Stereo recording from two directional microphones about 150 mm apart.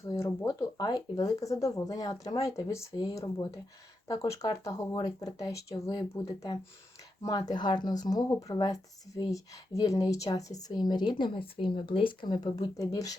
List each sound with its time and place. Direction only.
0.0 s speech: 20° left (ahead or behind)